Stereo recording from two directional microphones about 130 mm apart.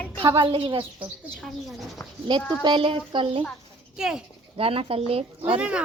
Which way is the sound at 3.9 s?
5° right (ahead or behind).